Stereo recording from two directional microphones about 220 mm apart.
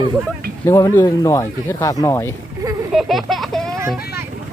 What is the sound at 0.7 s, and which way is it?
Speech, 15° left (ahead or behind).